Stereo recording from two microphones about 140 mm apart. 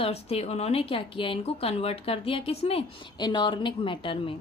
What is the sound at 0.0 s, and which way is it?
A woman's voice, 45° left (ahead or behind).